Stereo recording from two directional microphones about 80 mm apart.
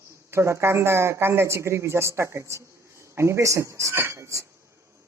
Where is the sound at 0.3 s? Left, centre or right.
Right.